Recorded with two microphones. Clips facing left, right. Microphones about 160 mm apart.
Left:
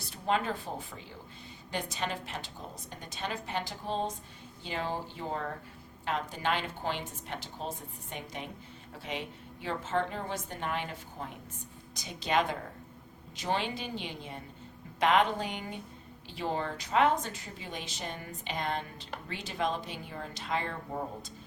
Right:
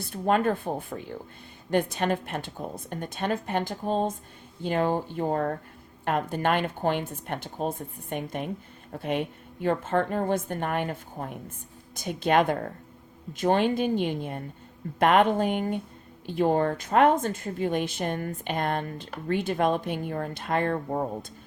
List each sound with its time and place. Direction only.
0.0 s a woman's voice: 50° right (ahead or behind)